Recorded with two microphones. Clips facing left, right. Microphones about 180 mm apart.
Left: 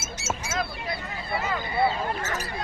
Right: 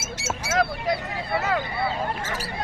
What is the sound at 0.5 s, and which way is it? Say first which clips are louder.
Duck: right 11 dB; 80° right.